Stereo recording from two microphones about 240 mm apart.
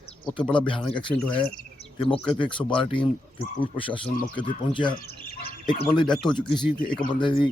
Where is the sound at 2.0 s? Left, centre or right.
Left.